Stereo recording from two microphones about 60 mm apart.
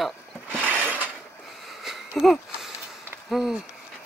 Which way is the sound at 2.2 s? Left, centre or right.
Centre.